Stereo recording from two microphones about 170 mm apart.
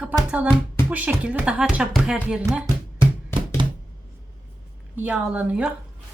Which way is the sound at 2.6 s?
30° right (ahead or behind).